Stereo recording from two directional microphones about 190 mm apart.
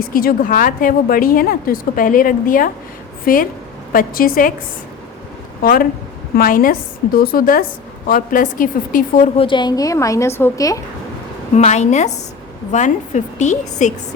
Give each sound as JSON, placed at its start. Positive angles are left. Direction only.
{"t": 0.1, "sound": "a woman's voice", "side_deg": 50}
{"t": 5.6, "sound": "a woman's voice", "side_deg": 50}
{"t": 9.4, "sound": "a woman's voice", "side_deg": 25}
{"t": 11.5, "sound": "a woman's voice", "side_deg": 35}